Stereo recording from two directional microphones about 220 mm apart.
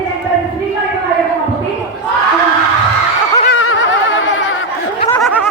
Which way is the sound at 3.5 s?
60° left (ahead or behind).